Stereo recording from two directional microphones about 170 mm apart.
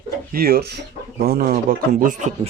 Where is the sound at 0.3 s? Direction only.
60° right (ahead or behind).